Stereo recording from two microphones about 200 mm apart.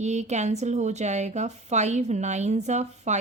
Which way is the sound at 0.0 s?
35° right (ahead or behind).